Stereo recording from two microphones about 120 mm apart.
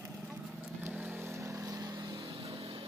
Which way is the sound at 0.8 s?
15° right (ahead or behind).